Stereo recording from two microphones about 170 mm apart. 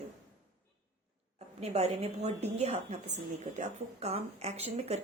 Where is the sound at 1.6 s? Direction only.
40° right (ahead or behind).